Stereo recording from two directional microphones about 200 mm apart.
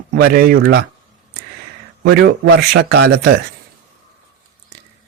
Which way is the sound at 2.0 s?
55° right (ahead or behind).